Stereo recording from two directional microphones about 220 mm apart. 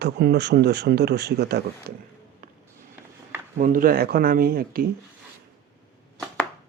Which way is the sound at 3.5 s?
35° right (ahead or behind).